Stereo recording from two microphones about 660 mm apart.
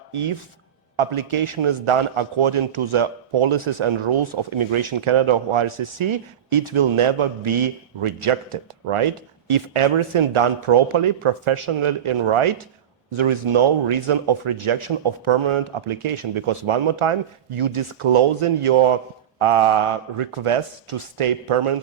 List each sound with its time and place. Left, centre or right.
0.1 s a man's voice: right